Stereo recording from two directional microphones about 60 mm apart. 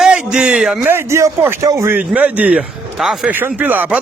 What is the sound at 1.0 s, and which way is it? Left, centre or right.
Speech, right.